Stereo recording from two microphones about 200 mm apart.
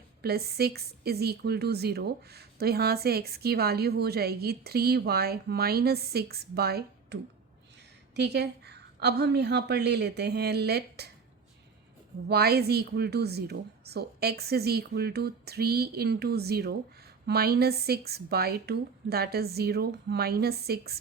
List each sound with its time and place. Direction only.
0.2 s a woman's voice: 50° right (ahead or behind)
12.3 s a woman's voice: 50° right (ahead or behind)